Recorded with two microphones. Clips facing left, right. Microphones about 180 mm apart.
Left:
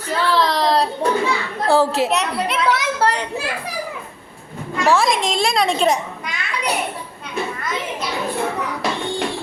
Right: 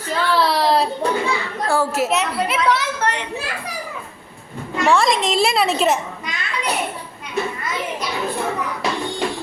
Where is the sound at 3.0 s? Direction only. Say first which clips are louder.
Left 3 dB; 40° left (ahead or behind).